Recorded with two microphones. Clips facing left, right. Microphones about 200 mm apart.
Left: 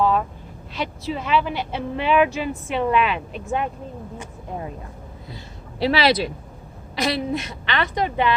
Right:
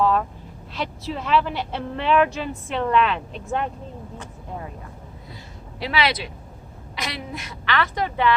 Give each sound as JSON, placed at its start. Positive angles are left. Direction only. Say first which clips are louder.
{"t": 0.0, "sound": "vehicle", "louder": "even", "side_deg": 5}
{"t": 0.7, "sound": "speech", "louder": "left 2 dB", "side_deg": 0}
{"t": 4.2, "sound": "vehicle", "louder": "left 4 dB", "side_deg": 20}
{"t": 5.8, "sound": "a woman's voice", "louder": "left 5 dB", "side_deg": 35}